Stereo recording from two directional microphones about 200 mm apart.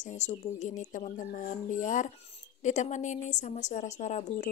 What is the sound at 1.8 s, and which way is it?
Speech, 40° left (ahead or behind).